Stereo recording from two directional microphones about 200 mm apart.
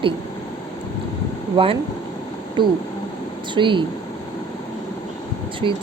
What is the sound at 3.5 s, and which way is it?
Speech, 25° right (ahead or behind).